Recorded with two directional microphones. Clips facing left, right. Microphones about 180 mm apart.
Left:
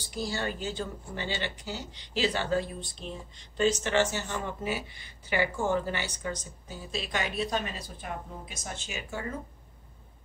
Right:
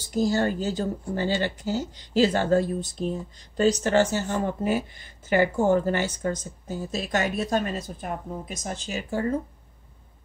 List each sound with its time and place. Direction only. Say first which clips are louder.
0.1 s speech: right 10 dB; 40° right (ahead or behind)